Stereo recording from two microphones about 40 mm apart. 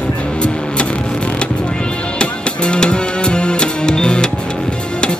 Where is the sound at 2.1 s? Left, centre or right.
Left.